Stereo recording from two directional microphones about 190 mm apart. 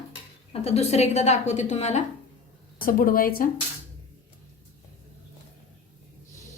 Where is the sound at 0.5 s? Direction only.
35° left (ahead or behind).